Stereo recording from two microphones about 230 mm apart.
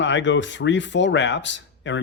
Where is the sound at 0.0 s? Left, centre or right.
Left.